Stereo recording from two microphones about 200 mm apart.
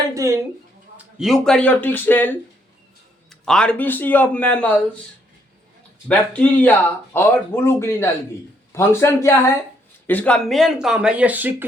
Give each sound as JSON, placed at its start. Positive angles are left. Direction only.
{"t": 0.1, "sound": "speech", "side_deg": -15}
{"t": 0.9, "sound": "speech", "side_deg": 0}
{"t": 6.1, "sound": "speech", "side_deg": 5}